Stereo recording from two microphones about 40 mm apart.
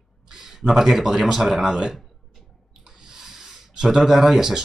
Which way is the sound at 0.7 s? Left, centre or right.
Centre.